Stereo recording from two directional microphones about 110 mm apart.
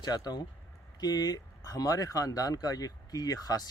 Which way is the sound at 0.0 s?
35° left (ahead or behind).